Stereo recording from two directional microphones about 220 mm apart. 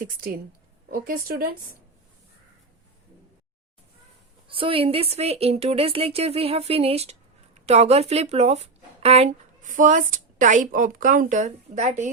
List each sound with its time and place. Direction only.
0.0 s speech: 40° right (ahead or behind)
4.4 s a woman's voice: 25° right (ahead or behind)